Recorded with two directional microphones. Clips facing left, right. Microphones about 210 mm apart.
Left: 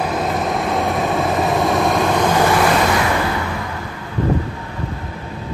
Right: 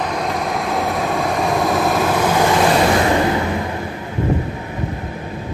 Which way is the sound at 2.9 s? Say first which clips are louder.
Right 3 dB; 30° right (ahead or behind).